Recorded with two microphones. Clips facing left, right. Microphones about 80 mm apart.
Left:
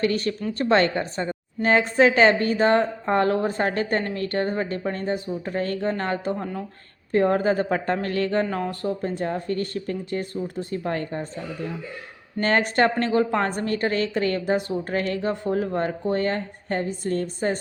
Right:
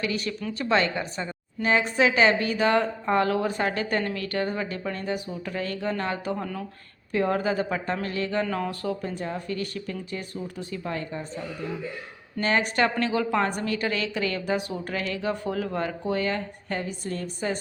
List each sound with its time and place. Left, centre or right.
0.0 s a woman's voice: left
7.1 s a woman's voice: left
8.4 s a woman's voice: left
12.4 s a woman's voice: left